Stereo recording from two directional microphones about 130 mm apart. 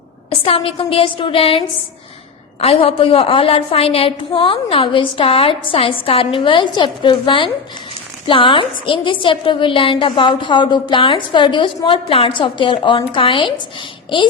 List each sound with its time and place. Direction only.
0.4 s a woman's voice: 45° left (ahead or behind)